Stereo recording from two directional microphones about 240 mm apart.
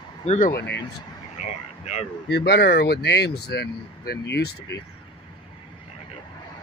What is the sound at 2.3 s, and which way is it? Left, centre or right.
Speech, left.